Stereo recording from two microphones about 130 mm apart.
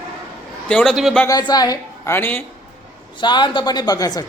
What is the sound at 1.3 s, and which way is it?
Speech, 30° left (ahead or behind).